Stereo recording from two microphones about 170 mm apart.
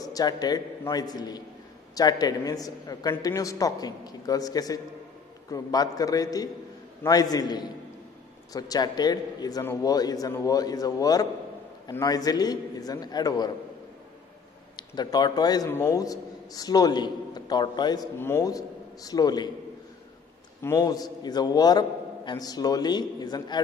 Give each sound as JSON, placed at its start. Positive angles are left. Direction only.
{"t": 0.0, "sound": "a man's voice", "side_deg": 20}
{"t": 14.8, "sound": "a man's voice", "side_deg": 25}
{"t": 20.6, "sound": "a man's voice", "side_deg": 20}